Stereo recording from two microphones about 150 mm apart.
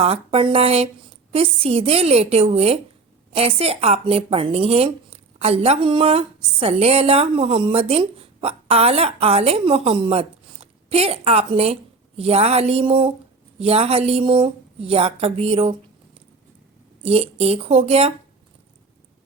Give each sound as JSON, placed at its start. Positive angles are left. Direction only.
{"t": 0.0, "sound": "a woman's voice", "side_deg": -40}
{"t": 17.0, "sound": "speech", "side_deg": -40}